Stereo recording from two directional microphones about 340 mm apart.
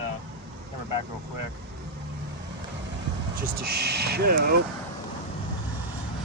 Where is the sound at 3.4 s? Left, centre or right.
Right.